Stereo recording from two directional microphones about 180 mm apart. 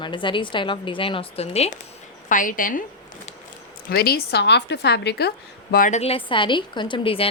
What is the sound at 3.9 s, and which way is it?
A woman's voice, 60° left (ahead or behind).